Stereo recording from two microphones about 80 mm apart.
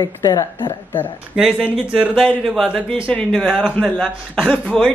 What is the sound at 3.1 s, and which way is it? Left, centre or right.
Speech, centre.